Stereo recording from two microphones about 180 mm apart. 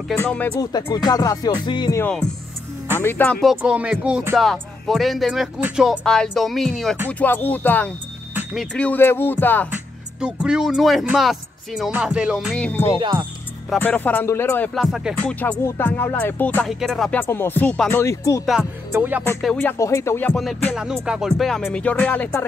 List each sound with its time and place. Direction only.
0.2 s speech: 10° left (ahead or behind)
0.6 s music: 20° left (ahead or behind)
3.0 s speech: 10° left (ahead or behind); by 4.4 s 10° right (ahead or behind)
4.4 s speech: centre (ahead or behind)
10.2 s speech: 5° right (ahead or behind)
12.5 s speech: 5° left (ahead or behind)
15.3 s speech: 10° left (ahead or behind)
18.4 s speech: centre (ahead or behind)
18.9 s music: 10° right (ahead or behind)
19.4 s speech: 5° left (ahead or behind)
19.8 s speech: 15° left (ahead or behind)